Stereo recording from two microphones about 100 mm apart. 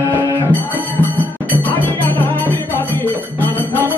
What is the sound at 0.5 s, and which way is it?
Music, 15° left (ahead or behind).